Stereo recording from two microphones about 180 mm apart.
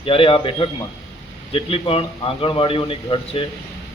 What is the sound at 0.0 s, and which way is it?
A man's voice, 30° left (ahead or behind).